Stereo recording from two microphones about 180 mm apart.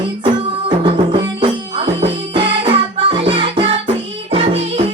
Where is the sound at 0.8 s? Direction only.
30° right (ahead or behind).